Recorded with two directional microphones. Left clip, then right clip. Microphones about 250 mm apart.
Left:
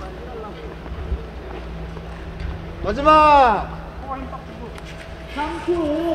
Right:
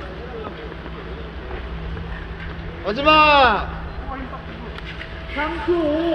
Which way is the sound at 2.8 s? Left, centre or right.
Left.